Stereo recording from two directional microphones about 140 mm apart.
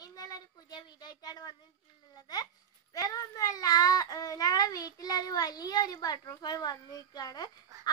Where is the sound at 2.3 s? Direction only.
30° left (ahead or behind).